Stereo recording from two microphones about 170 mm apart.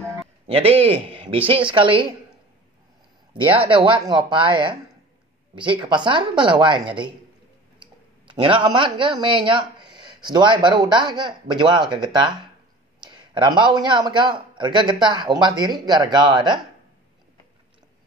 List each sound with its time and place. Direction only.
0.5 s a man's voice: 35° right (ahead or behind)
3.6 s a man's voice: 30° right (ahead or behind)
7.8 s clicking: 30° right (ahead or behind)
9.2 s a man's voice: 30° right (ahead or behind)